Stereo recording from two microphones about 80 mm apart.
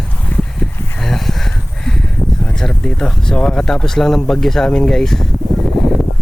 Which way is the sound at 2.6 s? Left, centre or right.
Centre.